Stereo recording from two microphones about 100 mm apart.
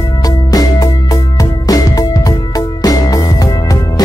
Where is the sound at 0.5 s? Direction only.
40° left (ahead or behind).